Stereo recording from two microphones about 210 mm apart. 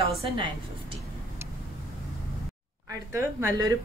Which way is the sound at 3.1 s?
15° right (ahead or behind).